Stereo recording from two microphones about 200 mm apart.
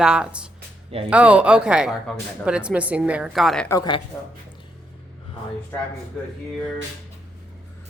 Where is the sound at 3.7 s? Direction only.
20° left (ahead or behind).